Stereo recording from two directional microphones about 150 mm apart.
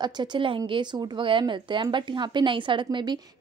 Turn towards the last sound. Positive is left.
turn(degrees=-30)  # may be behind; listen again after turning